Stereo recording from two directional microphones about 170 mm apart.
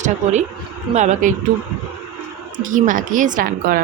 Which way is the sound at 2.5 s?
50° right (ahead or behind).